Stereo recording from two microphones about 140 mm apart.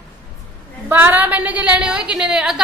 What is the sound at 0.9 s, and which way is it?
A woman's voice, 15° right (ahead or behind).